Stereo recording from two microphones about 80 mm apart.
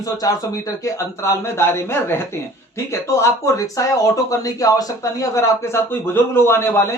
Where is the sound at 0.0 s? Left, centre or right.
Left.